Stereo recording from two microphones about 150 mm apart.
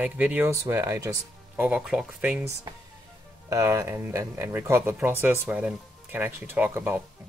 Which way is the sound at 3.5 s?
20° right (ahead or behind).